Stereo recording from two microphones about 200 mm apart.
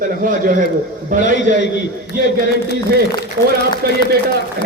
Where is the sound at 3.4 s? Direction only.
50° right (ahead or behind).